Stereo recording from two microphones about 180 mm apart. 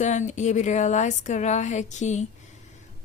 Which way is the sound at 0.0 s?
40° left (ahead or behind).